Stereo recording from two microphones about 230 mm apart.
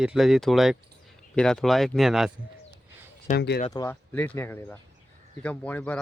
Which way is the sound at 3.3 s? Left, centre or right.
Left.